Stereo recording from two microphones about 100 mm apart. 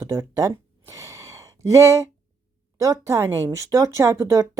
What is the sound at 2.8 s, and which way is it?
Speech, 30° right (ahead or behind).